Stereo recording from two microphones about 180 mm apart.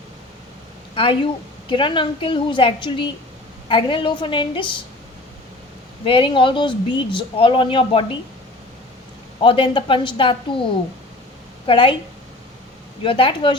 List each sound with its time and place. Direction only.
0.9 s speech: 30° left (ahead or behind)
6.1 s speech: 30° left (ahead or behind)
9.4 s speech: 30° left (ahead or behind)
11.6 s speech: 25° left (ahead or behind)
13.0 s speech: 30° left (ahead or behind)